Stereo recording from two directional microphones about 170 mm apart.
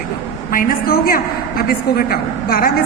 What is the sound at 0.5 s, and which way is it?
A woman's voice, 60° left (ahead or behind).